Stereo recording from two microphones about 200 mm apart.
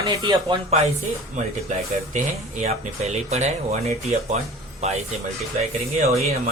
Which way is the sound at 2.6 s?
35° right (ahead or behind).